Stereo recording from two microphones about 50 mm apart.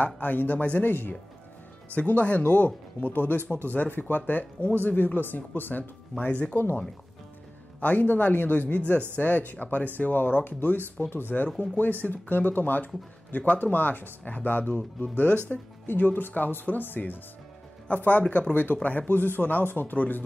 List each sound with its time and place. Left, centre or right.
0.0 s speech: left
7.8 s speech: left
15.3 s speech: right
15.9 s speech: left
17.8 s speech: left